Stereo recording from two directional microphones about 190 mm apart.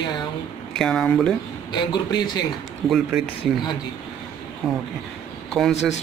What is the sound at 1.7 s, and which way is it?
Speech, 25° left (ahead or behind).